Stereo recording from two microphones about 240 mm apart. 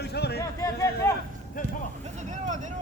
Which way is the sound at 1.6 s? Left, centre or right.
Left.